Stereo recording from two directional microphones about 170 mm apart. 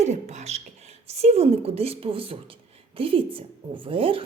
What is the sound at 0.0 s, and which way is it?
A woman's voice, 40° right (ahead or behind).